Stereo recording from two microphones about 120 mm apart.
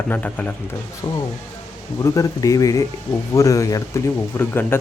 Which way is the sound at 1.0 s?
25° left (ahead or behind).